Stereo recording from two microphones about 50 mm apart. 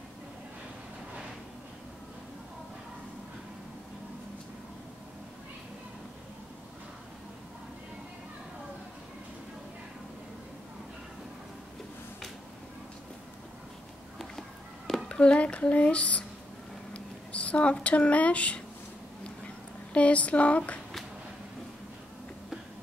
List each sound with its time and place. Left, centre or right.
15.0 s speech: left
19.9 s speech: left